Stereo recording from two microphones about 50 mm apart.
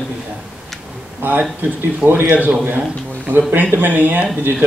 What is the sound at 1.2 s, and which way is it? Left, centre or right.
A man's voice, right.